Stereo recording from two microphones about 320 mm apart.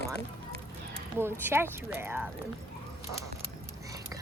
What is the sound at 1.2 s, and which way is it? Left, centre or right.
Speech, centre.